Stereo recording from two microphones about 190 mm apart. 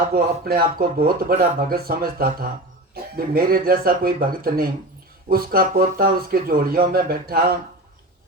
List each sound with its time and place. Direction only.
0.1 s speech: 50° right (ahead or behind)